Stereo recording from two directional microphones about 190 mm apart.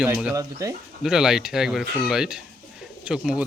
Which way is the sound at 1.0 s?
5° right (ahead or behind).